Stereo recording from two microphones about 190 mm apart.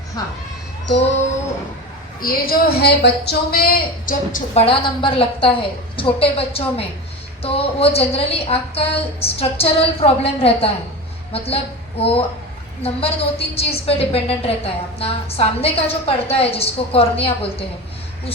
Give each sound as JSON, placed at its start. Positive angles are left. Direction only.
{"t": 0.2, "sound": "a woman's voice", "side_deg": 20}
{"t": 2.2, "sound": "a woman's voice", "side_deg": 50}
{"t": 4.6, "sound": "a woman's voice", "side_deg": 25}